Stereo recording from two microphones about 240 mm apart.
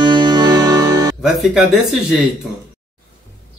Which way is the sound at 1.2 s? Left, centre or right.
Centre.